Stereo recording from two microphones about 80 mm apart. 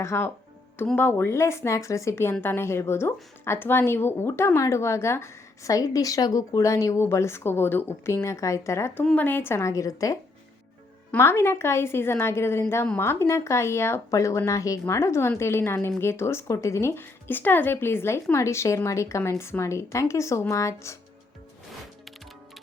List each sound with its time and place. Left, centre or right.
0.0 s speech: left
9.1 s speech: left
11.2 s speech: left